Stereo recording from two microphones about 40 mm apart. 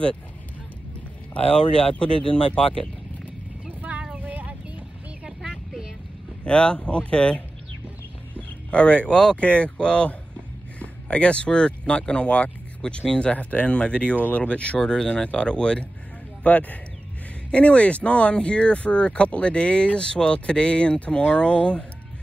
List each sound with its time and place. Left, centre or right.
1.3 s speech: left
4.2 s a sound: right
6.4 s speech: left
8.4 s a sound: left
9.1 s speech: centre
9.4 s speech: left
16.4 s speech: left